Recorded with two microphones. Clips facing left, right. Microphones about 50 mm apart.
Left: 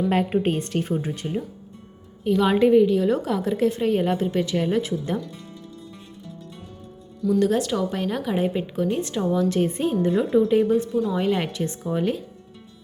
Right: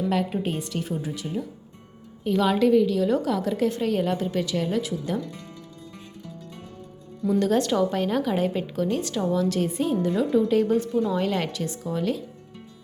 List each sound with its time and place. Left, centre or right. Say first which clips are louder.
0.1 s a woman's voice: left 4 dB; left
2.2 s a woman's voice: left 2 dB; centre
2.5 s a woman's voice: left 3 dB; left
7.3 s a woman's voice: even; centre
9.5 s a woman's voice: left 2 dB; left
11.6 s a woman's voice: left 3 dB; left